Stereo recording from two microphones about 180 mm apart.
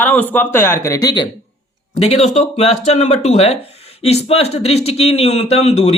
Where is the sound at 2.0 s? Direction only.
40° left (ahead or behind).